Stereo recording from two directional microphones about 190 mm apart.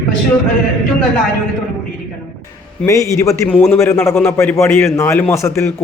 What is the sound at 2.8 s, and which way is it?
A man's voice, 15° left (ahead or behind).